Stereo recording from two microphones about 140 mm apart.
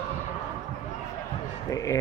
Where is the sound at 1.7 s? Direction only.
25° left (ahead or behind).